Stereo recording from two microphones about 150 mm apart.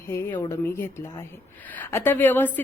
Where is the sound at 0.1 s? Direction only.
15° left (ahead or behind).